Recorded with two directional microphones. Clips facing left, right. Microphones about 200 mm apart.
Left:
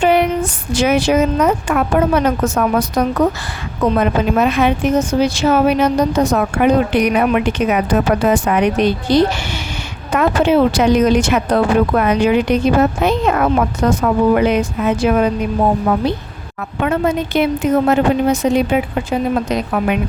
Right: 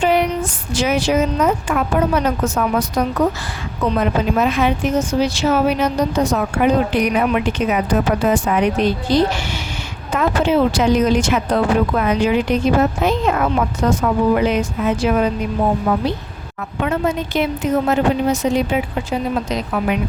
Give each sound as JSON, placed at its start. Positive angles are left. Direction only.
{"t": 0.0, "sound": "a sound", "side_deg": 60}
{"t": 0.7, "sound": "a woman's voice", "side_deg": 60}
{"t": 16.8, "sound": "a woman's voice", "side_deg": 60}